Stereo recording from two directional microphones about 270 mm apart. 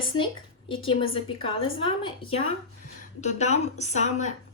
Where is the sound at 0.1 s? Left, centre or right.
Centre.